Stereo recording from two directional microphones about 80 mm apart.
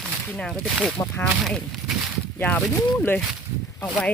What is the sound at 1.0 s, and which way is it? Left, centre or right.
Speech, left.